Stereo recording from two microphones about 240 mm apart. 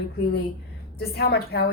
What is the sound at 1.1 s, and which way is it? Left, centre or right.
Speech, left.